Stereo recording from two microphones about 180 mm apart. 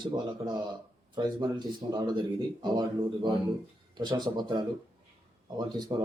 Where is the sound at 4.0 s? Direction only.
25° right (ahead or behind).